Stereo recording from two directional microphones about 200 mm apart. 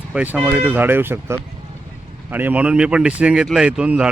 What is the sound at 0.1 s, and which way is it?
Speech, 5° right (ahead or behind).